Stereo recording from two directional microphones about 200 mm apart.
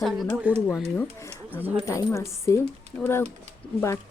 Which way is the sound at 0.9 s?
10° left (ahead or behind).